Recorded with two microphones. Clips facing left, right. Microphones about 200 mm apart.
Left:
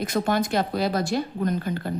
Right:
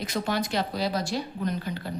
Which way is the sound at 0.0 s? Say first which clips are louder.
Left 5 dB; 50° left (ahead or behind).